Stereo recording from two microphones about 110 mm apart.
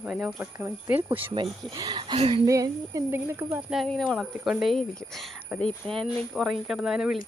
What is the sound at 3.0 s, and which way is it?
Speech, 20° right (ahead or behind).